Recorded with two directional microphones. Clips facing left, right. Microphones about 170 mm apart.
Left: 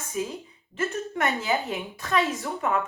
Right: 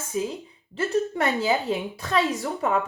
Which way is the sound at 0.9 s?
35° right (ahead or behind).